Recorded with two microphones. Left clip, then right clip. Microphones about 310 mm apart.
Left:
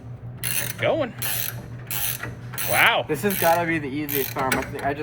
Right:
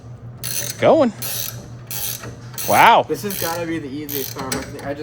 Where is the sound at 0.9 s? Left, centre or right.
Centre.